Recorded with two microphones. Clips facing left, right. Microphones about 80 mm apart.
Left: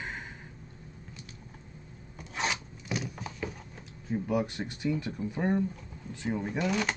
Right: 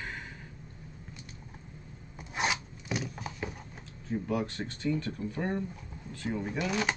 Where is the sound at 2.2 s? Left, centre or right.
Centre.